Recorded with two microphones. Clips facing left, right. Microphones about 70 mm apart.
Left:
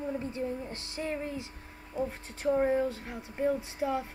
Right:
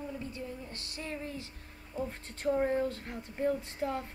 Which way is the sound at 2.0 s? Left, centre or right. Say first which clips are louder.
Left 4 dB; centre.